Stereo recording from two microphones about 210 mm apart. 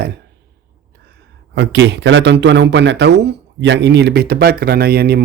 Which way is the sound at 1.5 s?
55° right (ahead or behind).